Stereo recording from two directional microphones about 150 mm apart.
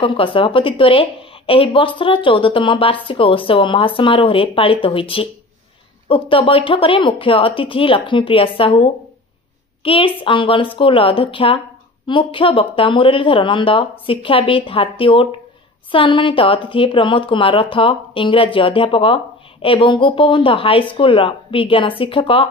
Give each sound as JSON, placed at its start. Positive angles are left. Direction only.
{"t": 0.0, "sound": "speech", "side_deg": 35}